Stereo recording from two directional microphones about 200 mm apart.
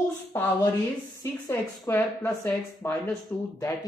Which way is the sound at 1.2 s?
10° left (ahead or behind).